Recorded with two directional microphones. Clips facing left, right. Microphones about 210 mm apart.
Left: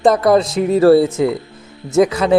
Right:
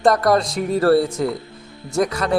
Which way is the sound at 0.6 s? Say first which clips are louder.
Left 6 dB; 25° left (ahead or behind).